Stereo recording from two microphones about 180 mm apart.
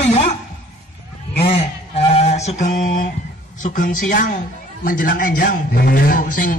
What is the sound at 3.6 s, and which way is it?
A man's voice, 45° left (ahead or behind).